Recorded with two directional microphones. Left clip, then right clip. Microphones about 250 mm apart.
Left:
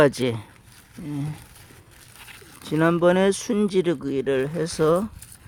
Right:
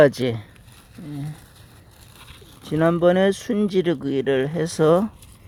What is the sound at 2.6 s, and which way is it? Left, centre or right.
Speech, centre.